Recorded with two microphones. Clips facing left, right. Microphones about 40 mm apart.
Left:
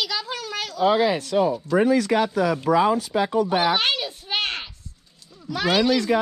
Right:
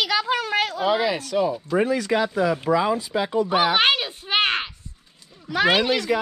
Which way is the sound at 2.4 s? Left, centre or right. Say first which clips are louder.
Even; right.